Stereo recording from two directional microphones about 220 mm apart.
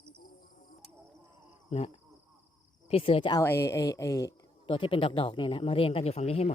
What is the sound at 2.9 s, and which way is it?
Speech, 25° left (ahead or behind).